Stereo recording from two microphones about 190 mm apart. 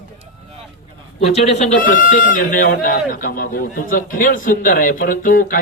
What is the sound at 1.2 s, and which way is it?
A man's voice, 35° left (ahead or behind).